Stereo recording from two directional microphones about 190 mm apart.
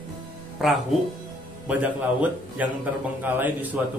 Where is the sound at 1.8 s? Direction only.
10° right (ahead or behind).